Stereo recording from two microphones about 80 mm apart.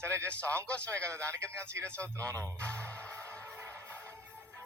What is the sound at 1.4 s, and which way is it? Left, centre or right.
Speech, centre.